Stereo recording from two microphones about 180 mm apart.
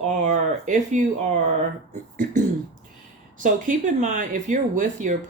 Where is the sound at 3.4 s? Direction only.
45° right (ahead or behind).